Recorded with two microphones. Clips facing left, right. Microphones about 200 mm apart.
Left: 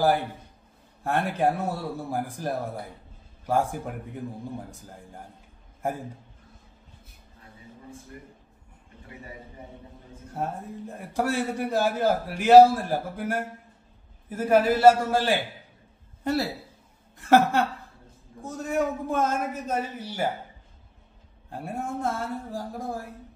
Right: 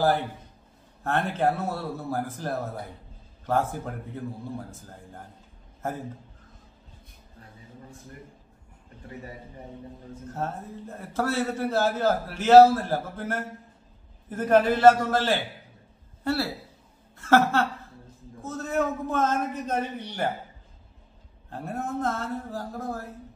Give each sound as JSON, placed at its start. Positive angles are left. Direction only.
{"t": 1.0, "sound": "a man's voice", "side_deg": 10}
{"t": 10.3, "sound": "a man's voice", "side_deg": 15}
{"t": 21.5, "sound": "a man's voice", "side_deg": 10}